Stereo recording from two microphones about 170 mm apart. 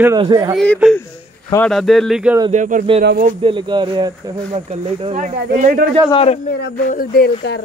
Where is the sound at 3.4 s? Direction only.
30° right (ahead or behind).